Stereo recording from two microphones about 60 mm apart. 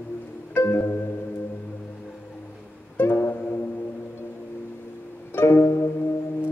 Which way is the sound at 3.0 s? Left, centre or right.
Left.